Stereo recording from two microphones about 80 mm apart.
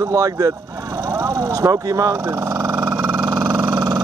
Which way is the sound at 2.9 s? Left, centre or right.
Right.